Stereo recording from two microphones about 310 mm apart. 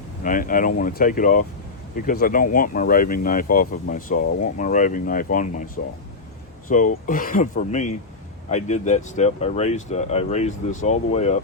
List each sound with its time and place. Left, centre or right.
0.3 s speech: left
6.7 s speech: left